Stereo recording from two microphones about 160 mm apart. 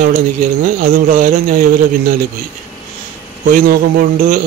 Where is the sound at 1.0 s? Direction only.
55° right (ahead or behind).